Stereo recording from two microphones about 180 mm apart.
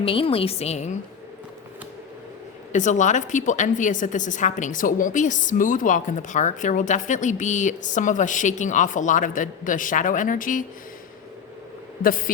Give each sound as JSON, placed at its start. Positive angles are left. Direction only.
{"t": 0.0, "sound": "a woman's voice", "side_deg": 30}
{"t": 2.7, "sound": "a woman's voice", "side_deg": 40}
{"t": 12.0, "sound": "a woman's voice", "side_deg": 50}